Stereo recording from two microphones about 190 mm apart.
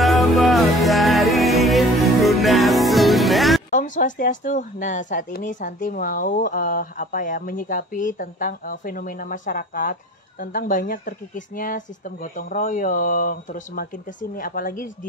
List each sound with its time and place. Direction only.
0.0 s music: centre (ahead or behind)
3.7 s speech: 45° left (ahead or behind)